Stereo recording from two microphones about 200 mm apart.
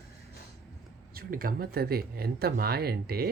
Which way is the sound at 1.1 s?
45° right (ahead or behind).